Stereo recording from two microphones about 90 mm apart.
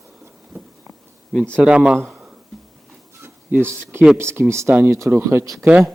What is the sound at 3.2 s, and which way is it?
Speech, 25° right (ahead or behind).